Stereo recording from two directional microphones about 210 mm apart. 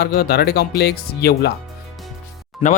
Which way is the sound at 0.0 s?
50° left (ahead or behind).